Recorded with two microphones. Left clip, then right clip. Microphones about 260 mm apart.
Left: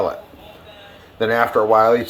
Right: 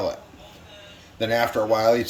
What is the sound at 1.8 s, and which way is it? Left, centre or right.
Speech, centre.